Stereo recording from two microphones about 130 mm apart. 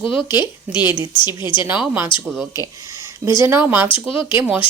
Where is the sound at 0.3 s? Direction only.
35° left (ahead or behind).